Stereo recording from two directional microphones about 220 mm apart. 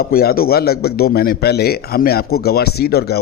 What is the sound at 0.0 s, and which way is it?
A man's voice, 45° left (ahead or behind).